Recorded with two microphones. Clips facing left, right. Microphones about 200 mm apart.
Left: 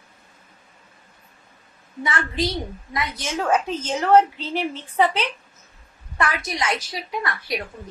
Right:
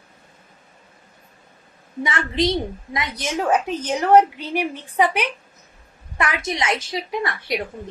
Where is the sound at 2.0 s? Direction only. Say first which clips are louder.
Right 3 dB; 25° right (ahead or behind).